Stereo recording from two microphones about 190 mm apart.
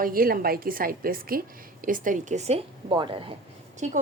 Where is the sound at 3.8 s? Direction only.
40° right (ahead or behind).